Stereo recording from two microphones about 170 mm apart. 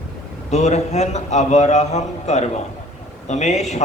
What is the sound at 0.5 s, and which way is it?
A man's voice, 40° left (ahead or behind).